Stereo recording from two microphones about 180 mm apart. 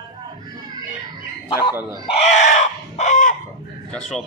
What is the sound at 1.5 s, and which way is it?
Speech, 25° left (ahead or behind).